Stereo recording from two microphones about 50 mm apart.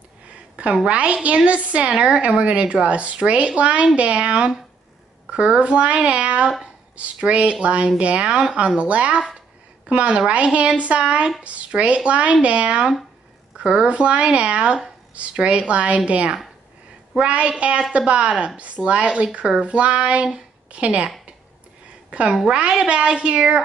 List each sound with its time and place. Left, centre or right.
0.8 s a woman's voice: right
22.1 s a woman's voice: right